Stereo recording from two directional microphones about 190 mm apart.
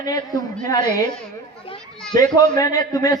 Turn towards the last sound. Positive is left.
turn(degrees=20)  # may be behind; listen again after turning